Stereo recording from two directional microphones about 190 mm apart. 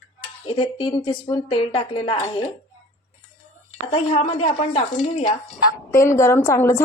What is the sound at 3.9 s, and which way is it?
Speech, 30° left (ahead or behind).